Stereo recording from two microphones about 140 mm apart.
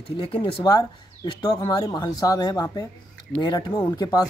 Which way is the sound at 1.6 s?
35° left (ahead or behind).